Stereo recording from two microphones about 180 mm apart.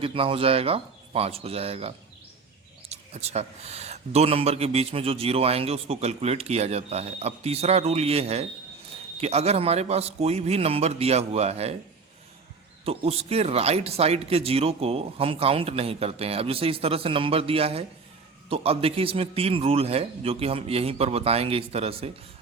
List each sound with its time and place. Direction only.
0.0 s speech: 30° right (ahead or behind)
2.9 s speech: 35° right (ahead or behind)
12.8 s speech: 35° right (ahead or behind)